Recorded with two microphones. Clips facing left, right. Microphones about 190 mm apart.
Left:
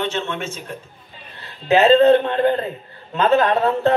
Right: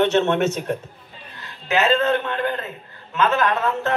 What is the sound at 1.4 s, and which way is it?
A man's voice, 35° left (ahead or behind).